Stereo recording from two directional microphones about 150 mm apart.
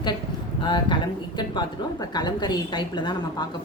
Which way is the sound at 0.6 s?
30° left (ahead or behind).